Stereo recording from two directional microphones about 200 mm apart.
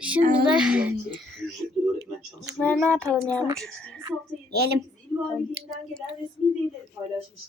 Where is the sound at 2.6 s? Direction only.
5° left (ahead or behind).